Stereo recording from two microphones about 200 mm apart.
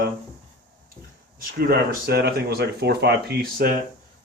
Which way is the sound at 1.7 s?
50° right (ahead or behind).